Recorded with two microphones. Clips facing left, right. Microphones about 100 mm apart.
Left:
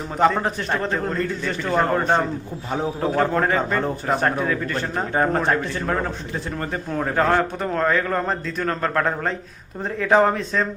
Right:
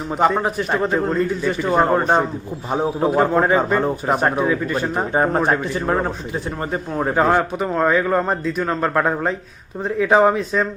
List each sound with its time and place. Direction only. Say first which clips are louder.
0.2 s a man's voice: right 1 dB; 10° right (ahead or behind)